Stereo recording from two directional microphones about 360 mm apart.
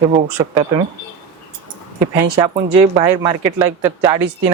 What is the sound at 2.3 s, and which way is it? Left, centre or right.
Speech, centre.